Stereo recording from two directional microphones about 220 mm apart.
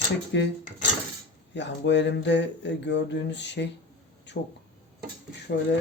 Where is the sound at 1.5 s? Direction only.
55° left (ahead or behind).